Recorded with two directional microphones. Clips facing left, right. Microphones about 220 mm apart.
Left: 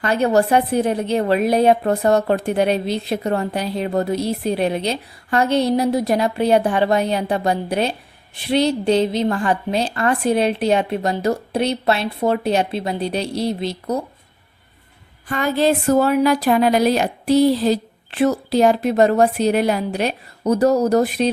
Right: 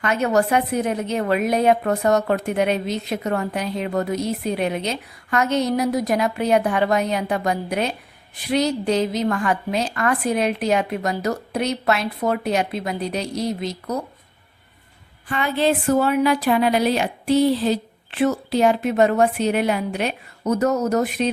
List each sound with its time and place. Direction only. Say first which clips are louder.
0.0 s a woman's voice: left 3 dB; 35° left (ahead or behind)
15.3 s a woman's voice: left 3 dB; 40° left (ahead or behind)